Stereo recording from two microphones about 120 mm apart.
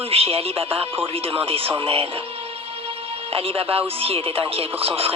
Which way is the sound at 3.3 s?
50° right (ahead or behind).